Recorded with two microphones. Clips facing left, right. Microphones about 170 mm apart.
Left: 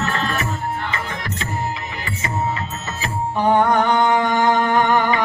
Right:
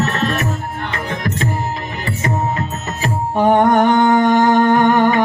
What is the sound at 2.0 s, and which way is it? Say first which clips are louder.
Music: right 4 dB; 45° right (ahead or behind).